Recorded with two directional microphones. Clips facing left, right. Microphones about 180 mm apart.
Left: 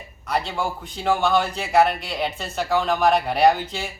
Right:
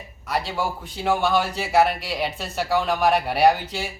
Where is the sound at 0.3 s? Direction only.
5° right (ahead or behind).